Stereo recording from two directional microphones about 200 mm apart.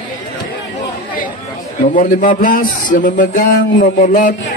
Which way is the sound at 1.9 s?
40° left (ahead or behind).